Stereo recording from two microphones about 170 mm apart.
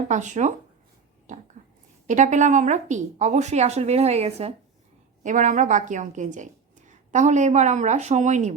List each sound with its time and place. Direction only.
0.1 s a woman's voice: 45° right (ahead or behind)
1.6 s a sound: 45° right (ahead or behind)
2.0 s a woman's voice: 45° right (ahead or behind)
5.2 s a woman's voice: 50° right (ahead or behind)